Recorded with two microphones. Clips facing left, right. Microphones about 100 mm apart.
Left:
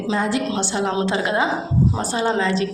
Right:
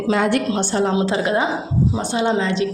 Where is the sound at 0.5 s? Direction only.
40° right (ahead or behind).